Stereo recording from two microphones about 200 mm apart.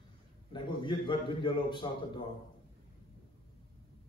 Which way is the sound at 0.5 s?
25° left (ahead or behind).